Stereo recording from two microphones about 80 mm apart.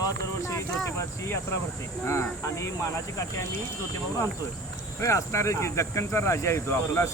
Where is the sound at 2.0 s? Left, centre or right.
Left.